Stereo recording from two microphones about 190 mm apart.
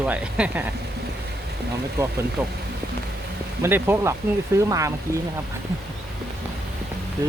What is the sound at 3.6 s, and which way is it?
Speech, 15° right (ahead or behind).